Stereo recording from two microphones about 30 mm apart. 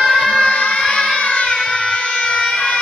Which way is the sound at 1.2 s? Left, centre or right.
Left.